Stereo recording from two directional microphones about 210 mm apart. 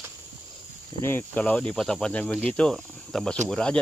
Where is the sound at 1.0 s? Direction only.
10° left (ahead or behind).